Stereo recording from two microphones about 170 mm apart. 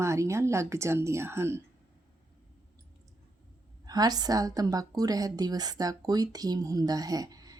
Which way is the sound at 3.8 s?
25° right (ahead or behind).